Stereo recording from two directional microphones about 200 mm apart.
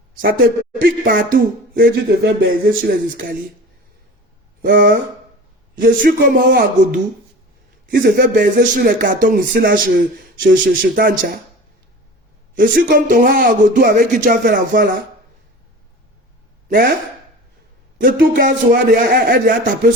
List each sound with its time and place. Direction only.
0.2 s speech: 45° right (ahead or behind)
4.6 s speech: 45° right (ahead or behind)
12.5 s speech: 45° right (ahead or behind)
16.6 s speech: 45° right (ahead or behind)
17.9 s speech: 40° right (ahead or behind)